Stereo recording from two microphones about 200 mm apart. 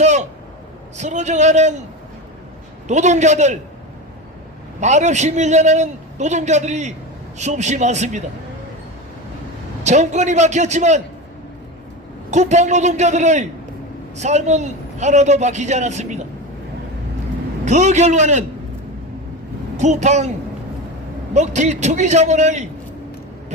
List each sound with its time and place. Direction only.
0.0 s a sound: 35° right (ahead or behind)
0.9 s a man's voice: 35° right (ahead or behind)
2.8 s a man's voice: 35° right (ahead or behind)
4.8 s a man's voice: 35° right (ahead or behind)
9.8 s a man's voice: 35° right (ahead or behind)
12.3 s a man's voice: 35° right (ahead or behind)
17.7 s a man's voice: 35° right (ahead or behind)
19.7 s a man's voice: 35° right (ahead or behind)
21.3 s a man's voice: 35° right (ahead or behind)